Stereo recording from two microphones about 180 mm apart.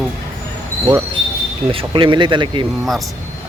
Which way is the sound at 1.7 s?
30° right (ahead or behind).